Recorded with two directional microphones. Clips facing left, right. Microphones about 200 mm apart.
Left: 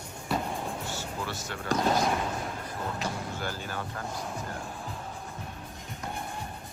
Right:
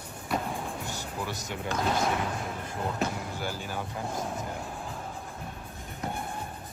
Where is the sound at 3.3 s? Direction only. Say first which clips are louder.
Right 1 dB; 10° right (ahead or behind).